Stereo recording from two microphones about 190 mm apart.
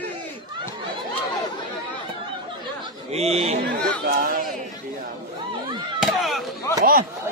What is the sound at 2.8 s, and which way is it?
Chatter, 35° right (ahead or behind).